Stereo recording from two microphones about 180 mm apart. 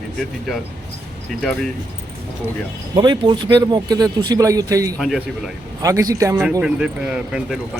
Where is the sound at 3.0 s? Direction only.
25° right (ahead or behind).